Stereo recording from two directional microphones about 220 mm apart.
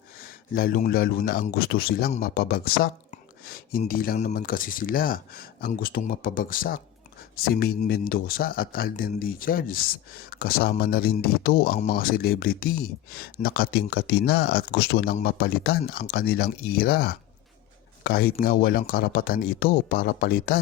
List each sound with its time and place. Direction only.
0.5 s speech: 40° left (ahead or behind)